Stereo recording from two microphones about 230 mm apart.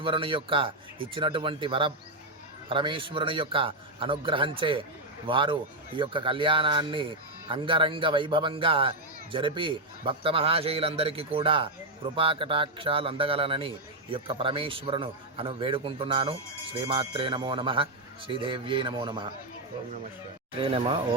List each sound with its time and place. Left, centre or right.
0.0 s a man's voice: right
20.6 s a man's voice: right